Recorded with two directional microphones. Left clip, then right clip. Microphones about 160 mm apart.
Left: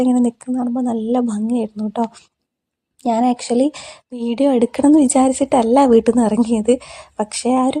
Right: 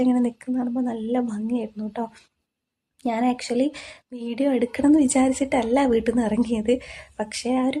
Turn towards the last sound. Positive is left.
turn(degrees=35)  # may be behind; listen again after turning